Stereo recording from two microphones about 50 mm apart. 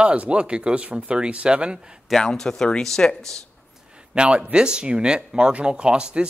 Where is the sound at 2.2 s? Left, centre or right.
Centre.